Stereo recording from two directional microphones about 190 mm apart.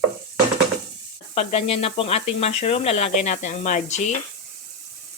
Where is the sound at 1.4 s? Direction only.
35° left (ahead or behind).